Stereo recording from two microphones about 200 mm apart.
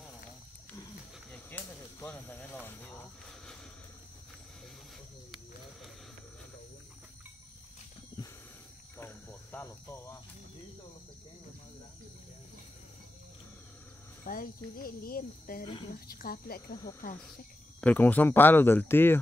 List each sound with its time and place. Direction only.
1.3 s a sound: 10° left (ahead or behind)
8.2 s a sound: 20° left (ahead or behind)
8.9 s cricket: 10° left (ahead or behind)
14.2 s speech: 45° left (ahead or behind)
15.6 s speech: 25° left (ahead or behind)
15.9 s speech: 45° left (ahead or behind)
17.7 s speech: 10° left (ahead or behind)